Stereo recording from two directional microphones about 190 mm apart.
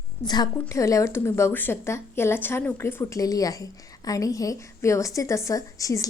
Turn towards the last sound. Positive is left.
turn(degrees=15)  # may be behind; listen again after turning